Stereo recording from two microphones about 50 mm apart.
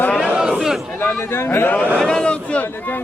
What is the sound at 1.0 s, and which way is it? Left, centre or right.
Speech, left.